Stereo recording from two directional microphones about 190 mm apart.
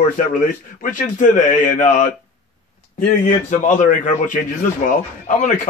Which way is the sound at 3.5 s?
40° left (ahead or behind).